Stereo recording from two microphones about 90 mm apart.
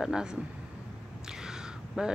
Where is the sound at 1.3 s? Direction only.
5° right (ahead or behind).